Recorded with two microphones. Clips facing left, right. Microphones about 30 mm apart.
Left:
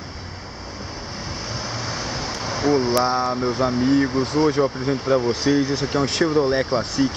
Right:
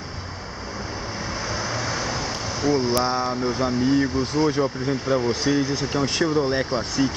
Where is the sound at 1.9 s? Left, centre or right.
Centre.